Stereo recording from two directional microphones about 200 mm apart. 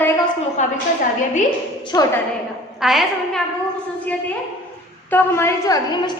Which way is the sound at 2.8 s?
Centre (ahead or behind).